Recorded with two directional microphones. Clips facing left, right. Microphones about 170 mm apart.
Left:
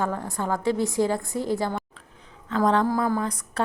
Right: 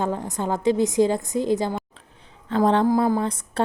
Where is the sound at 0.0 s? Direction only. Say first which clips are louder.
Right 2 dB; 20° right (ahead or behind).